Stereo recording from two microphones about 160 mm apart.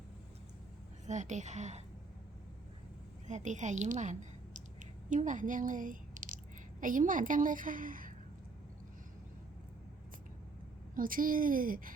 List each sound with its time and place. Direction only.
1.0 s a woman's voice: 50° right (ahead or behind)
3.2 s speech: 50° right (ahead or behind)
10.9 s a woman's voice: 60° right (ahead or behind)